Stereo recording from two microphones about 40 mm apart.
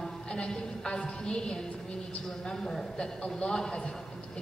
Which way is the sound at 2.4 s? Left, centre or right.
Centre.